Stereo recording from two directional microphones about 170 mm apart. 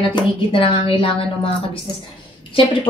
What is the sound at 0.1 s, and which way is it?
A woman's voice, 30° left (ahead or behind).